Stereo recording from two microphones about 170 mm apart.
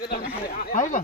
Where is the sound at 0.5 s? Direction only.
50° left (ahead or behind).